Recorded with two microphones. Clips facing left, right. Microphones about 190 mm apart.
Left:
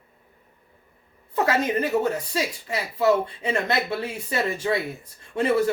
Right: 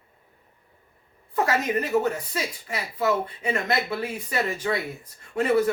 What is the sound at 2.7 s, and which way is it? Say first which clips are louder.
A woman's voice: left 4 dB; 25° left (ahead or behind).